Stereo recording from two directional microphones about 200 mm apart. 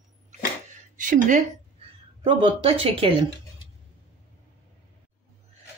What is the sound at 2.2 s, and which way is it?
Speech, 25° right (ahead or behind).